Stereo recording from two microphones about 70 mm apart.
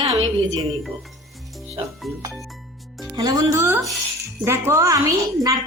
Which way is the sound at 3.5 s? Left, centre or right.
Right.